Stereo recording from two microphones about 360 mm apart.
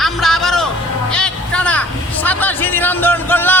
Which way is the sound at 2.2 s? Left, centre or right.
Centre.